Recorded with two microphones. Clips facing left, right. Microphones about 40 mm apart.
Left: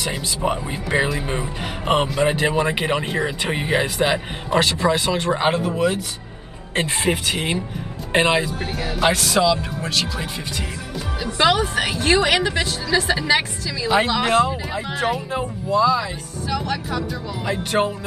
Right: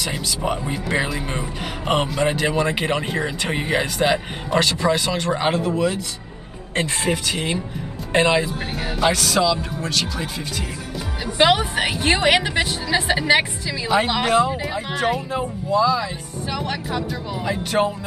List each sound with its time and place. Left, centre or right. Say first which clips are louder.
0.5 s a man's voice: left 1 dB; centre
6.9 s speech: left 3 dB; centre
8.5 s a woman's voice: left 1 dB; centre
9.2 s speech: left 1 dB; centre
11.3 s a woman's voice: right 1 dB; right
14.2 s a man's voice: even; centre
16.4 s speech: left 2 dB; right
17.5 s a man's voice: even; centre